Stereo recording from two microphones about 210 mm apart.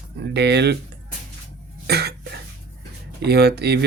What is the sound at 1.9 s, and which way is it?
Cough, 50° right (ahead or behind).